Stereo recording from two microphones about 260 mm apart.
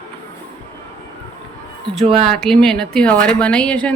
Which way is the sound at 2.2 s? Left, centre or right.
Centre.